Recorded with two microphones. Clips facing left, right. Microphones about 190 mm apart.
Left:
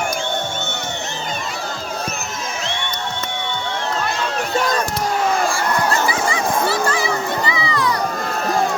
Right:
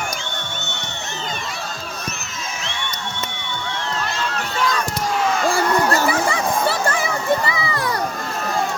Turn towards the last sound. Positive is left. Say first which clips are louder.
# left 3 dB
turn(degrees=-50)  # may be behind; listen again after turning